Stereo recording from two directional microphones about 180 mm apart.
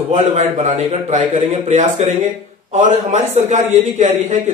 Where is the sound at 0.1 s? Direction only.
40° right (ahead or behind).